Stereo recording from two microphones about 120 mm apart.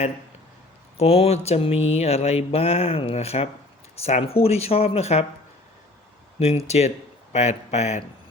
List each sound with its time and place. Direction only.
0.9 s speech: 55° left (ahead or behind)
6.7 s speech: 65° left (ahead or behind)